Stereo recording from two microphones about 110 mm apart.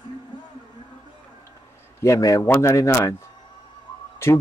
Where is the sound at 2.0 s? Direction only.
30° left (ahead or behind).